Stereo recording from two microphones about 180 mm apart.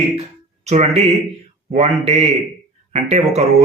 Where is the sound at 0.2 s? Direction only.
40° right (ahead or behind).